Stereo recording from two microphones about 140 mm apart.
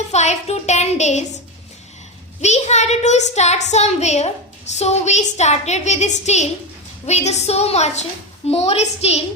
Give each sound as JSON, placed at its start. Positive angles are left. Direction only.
{"t": 0.1, "sound": "speech", "side_deg": 55}
{"t": 2.4, "sound": "speech", "side_deg": 55}